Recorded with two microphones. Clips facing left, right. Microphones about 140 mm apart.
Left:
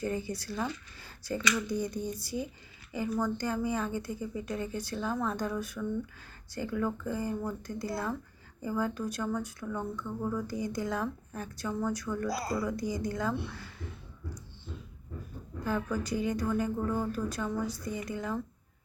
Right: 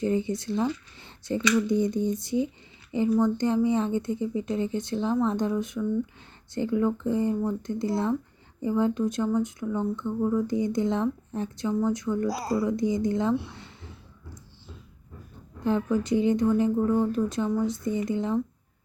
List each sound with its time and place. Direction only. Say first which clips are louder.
0.0 s speech: right 8 dB; 25° right (ahead or behind)
15.6 s speech: right 7 dB; 25° right (ahead or behind)